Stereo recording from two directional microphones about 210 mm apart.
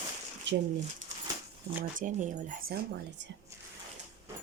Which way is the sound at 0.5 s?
60° right (ahead or behind).